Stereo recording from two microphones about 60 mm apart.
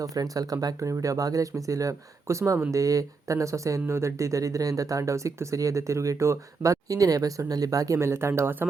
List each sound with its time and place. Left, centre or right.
0.0 s speech: right
2.7 s speech: right
7.9 s speech: right